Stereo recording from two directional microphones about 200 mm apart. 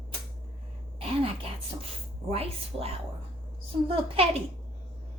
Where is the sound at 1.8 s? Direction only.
30° right (ahead or behind).